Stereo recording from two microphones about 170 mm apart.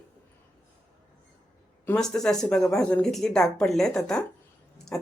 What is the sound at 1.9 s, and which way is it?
A woman's voice, 5° left (ahead or behind).